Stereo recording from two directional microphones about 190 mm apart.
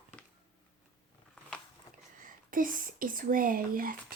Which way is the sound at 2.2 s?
45° right (ahead or behind).